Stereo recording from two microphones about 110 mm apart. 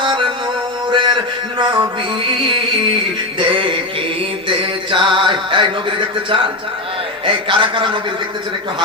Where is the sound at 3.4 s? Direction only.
50° right (ahead or behind).